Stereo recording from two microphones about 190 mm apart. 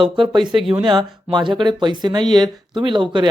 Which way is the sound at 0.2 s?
25° right (ahead or behind).